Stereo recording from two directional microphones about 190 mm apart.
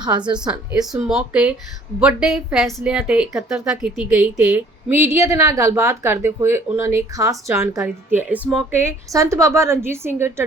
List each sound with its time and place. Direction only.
0.0 s a woman's voice: 25° right (ahead or behind)
0.3 s a woman's voice: 5° right (ahead or behind)